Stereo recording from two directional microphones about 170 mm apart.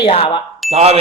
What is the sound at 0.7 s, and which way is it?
Speech, 40° right (ahead or behind).